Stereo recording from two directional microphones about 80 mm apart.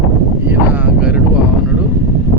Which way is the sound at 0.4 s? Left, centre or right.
Right.